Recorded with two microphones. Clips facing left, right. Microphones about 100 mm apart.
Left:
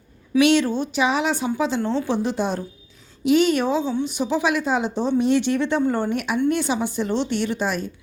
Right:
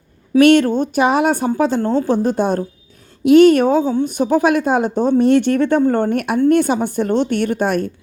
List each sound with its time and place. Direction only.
0.3 s a woman's voice: 50° right (ahead or behind)